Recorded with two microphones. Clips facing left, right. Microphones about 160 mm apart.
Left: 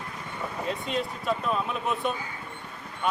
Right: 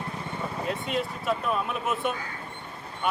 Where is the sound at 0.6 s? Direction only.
Centre (ahead or behind).